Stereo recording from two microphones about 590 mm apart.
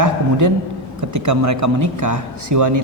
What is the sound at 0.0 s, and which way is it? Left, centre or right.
A man's voice, right.